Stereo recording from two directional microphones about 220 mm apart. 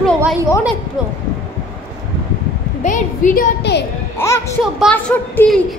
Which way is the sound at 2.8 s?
35° left (ahead or behind).